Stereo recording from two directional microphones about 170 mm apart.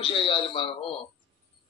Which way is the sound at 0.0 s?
30° left (ahead or behind).